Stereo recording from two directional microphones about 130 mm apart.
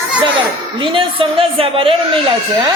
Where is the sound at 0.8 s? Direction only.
40° right (ahead or behind).